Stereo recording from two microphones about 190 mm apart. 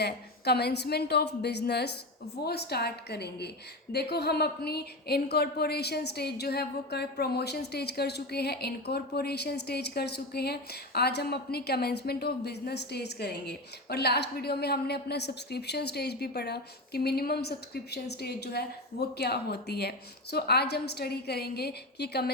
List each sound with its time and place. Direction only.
0.0 s a woman's voice: 60° left (ahead or behind)